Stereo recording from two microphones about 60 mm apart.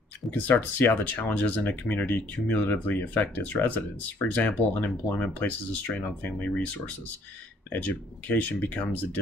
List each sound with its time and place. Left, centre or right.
0.3 s speech: left